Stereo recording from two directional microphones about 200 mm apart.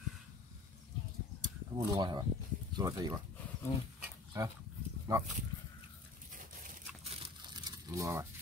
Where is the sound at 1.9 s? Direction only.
20° right (ahead or behind).